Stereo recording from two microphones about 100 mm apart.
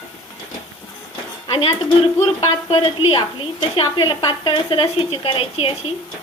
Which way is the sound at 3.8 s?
50° left (ahead or behind).